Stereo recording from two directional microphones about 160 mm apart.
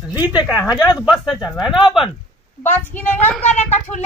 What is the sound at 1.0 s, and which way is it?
Speech, 5° right (ahead or behind).